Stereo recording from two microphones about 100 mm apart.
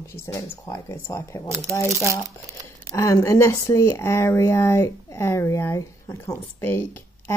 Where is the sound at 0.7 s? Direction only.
25° left (ahead or behind).